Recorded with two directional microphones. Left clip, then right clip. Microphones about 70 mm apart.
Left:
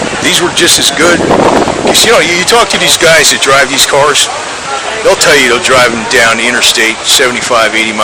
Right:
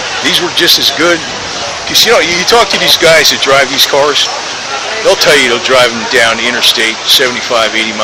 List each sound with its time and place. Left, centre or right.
0.3 s speech: left
3.0 s speech: left